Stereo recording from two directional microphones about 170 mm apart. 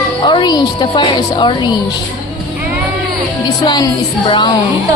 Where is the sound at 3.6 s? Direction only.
25° left (ahead or behind).